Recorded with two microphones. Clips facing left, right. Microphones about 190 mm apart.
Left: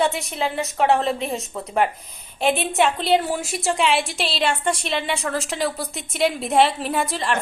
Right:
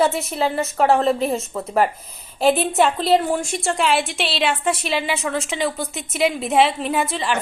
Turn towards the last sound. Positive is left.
turn(degrees=0)  # may be behind; listen again after turning